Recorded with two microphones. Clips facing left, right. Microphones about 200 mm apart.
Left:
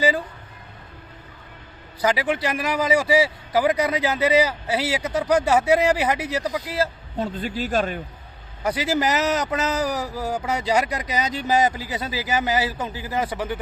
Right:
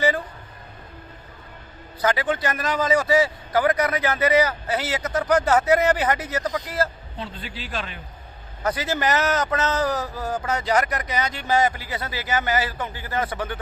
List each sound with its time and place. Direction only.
2.0 s a man's voice: 15° left (ahead or behind)
7.2 s a man's voice: 45° left (ahead or behind)
8.6 s a man's voice: 15° left (ahead or behind)